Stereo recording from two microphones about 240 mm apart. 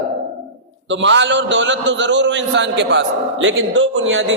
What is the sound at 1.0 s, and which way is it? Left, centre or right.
A man's voice, right.